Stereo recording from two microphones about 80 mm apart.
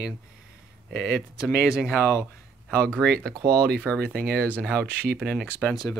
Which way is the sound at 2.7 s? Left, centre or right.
Centre.